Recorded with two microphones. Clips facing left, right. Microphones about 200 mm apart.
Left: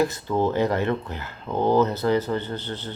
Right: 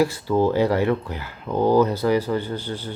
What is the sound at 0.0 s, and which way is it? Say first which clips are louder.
Speech: right 3 dB; 10° right (ahead or behind).